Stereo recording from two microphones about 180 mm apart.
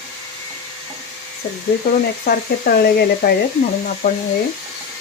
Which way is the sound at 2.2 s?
60° left (ahead or behind).